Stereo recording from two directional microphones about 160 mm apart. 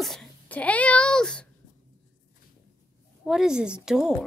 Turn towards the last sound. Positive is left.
turn(degrees=-5)  # may be behind; listen again after turning